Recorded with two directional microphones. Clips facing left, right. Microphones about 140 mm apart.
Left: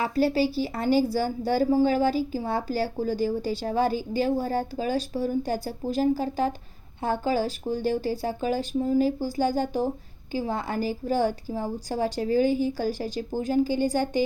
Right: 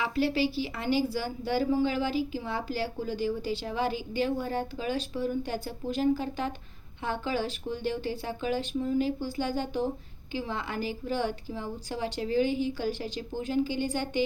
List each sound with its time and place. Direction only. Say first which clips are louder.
0.0 s speech: left 4 dB; 40° left (ahead or behind)